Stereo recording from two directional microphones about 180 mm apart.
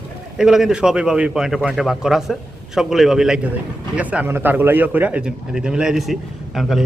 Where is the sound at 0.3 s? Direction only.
Centre (ahead or behind).